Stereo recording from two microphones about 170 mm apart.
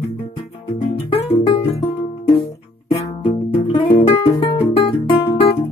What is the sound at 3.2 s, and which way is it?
Music, 35° left (ahead or behind).